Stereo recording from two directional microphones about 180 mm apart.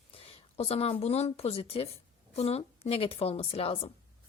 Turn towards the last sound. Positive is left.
turn(degrees=30)  # may be behind; listen again after turning